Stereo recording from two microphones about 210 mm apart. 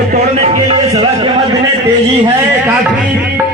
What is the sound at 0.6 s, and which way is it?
Speech, 25° right (ahead or behind).